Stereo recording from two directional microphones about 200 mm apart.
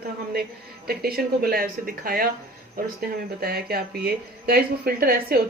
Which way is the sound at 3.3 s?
50° right (ahead or behind).